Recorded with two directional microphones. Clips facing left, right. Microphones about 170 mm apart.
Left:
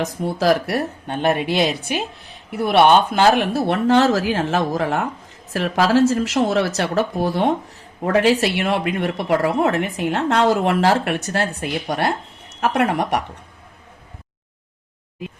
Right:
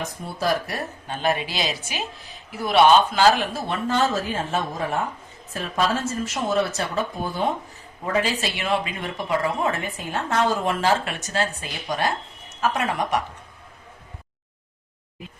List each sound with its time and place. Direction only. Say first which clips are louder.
0.0 s speech: left 7 dB; 90° left
8.0 s speech: left 8 dB; 65° left (ahead or behind)